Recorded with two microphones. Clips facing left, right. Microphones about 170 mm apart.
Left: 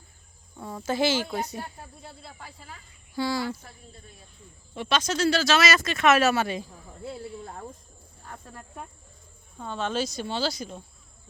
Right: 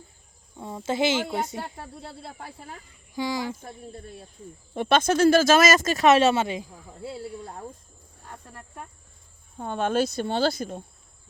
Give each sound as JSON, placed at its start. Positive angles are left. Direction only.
{"t": 0.5, "sound": "speech", "side_deg": -20}
{"t": 1.7, "sound": "speech", "side_deg": -70}
{"t": 3.2, "sound": "speech", "side_deg": -15}
{"t": 4.7, "sound": "speech", "side_deg": -50}
{"t": 9.6, "sound": "speech", "side_deg": -50}